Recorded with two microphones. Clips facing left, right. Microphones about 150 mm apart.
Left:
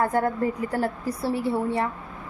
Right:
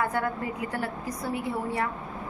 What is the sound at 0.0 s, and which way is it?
A woman's voice, 40° left (ahead or behind).